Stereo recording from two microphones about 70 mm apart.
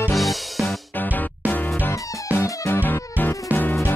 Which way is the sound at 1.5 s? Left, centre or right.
Left.